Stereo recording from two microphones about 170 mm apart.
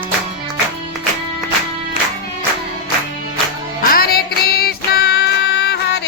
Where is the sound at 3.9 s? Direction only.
65° left (ahead or behind).